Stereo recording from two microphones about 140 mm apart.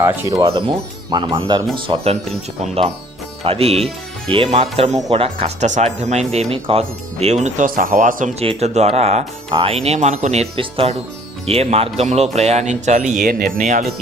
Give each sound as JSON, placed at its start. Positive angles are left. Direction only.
{"t": 0.0, "sound": "speech", "side_deg": -20}
{"t": 0.4, "sound": "speech", "side_deg": -30}
{"t": 3.4, "sound": "speech", "side_deg": -45}
{"t": 7.4, "sound": "speech", "side_deg": -65}
{"t": 8.4, "sound": "speech", "side_deg": -50}
{"t": 10.6, "sound": "speech", "side_deg": -40}
{"t": 13.2, "sound": "speech", "side_deg": -75}